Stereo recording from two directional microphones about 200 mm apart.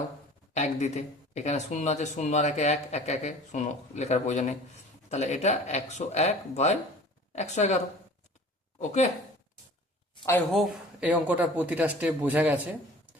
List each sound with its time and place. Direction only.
0.5 s speech: 35° left (ahead or behind)
8.8 s speech: 35° left (ahead or behind)
10.5 s speech: centre (ahead or behind)